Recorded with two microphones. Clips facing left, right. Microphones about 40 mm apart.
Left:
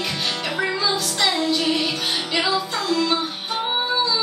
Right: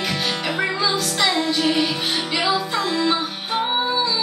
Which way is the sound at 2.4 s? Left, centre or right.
Centre.